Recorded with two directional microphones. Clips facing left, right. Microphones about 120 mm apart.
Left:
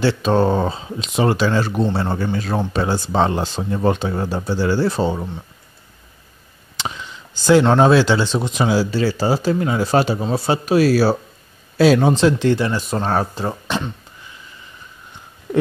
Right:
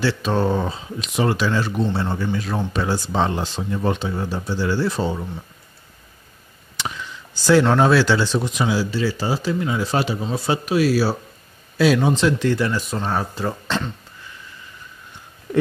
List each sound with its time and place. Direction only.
0.0 s speech: 30° left (ahead or behind)
7.4 s speech: 25° left (ahead or behind)
8.6 s speech: 40° left (ahead or behind)
11.8 s speech: 35° left (ahead or behind)
12.9 s speech: 45° left (ahead or behind)
13.3 s speech: 25° left (ahead or behind)
13.7 s speech: 15° left (ahead or behind)